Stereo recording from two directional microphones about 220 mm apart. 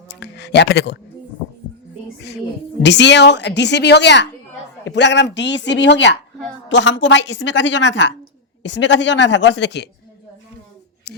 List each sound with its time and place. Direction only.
0.2 s speech: 50° left (ahead or behind)
2.8 s a woman's voice: 50° left (ahead or behind)